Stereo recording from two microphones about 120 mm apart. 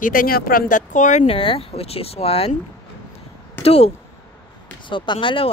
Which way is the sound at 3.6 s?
55° left (ahead or behind).